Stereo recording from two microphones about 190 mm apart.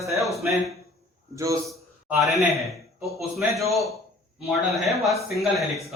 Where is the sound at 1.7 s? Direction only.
Centre (ahead or behind).